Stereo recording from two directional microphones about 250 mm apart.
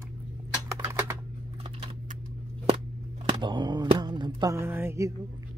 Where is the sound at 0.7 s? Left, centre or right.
Centre.